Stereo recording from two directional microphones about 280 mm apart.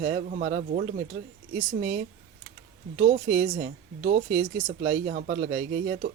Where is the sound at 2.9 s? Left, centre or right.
Right.